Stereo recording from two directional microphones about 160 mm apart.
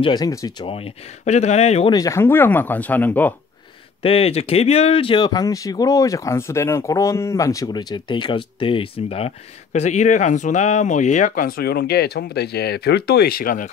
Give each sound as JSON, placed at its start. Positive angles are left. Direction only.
{"t": 0.0, "sound": "speech", "side_deg": 25}
{"t": 0.7, "sound": "speech", "side_deg": 35}
{"t": 1.9, "sound": "speech", "side_deg": 20}
{"t": 4.0, "sound": "speech", "side_deg": 35}